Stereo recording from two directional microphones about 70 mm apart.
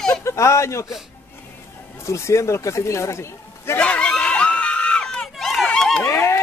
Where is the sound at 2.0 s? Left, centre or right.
Left.